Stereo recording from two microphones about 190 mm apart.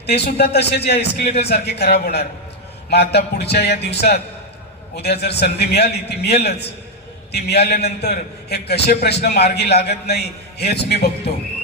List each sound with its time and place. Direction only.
0.0 s a man's voice: 60° left (ahead or behind)
5.2 s a man's voice: 60° left (ahead or behind)